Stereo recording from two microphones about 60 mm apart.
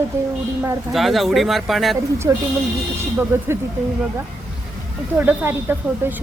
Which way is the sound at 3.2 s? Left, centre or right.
Right.